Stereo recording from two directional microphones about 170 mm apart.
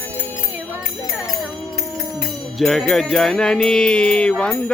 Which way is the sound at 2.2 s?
Centre (ahead or behind).